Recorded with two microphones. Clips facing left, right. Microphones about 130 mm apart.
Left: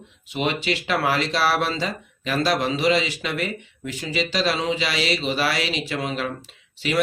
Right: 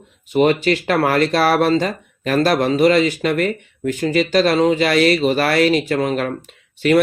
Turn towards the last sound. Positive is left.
turn(degrees=-50)  # may be behind; listen again after turning